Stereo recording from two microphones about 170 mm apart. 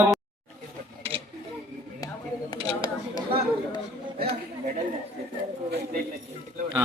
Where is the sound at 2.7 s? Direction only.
25° left (ahead or behind).